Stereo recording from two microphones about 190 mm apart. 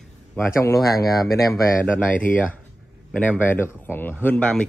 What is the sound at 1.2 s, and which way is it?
Speech, centre (ahead or behind).